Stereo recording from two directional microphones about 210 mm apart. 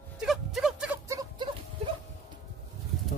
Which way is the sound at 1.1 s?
15° right (ahead or behind).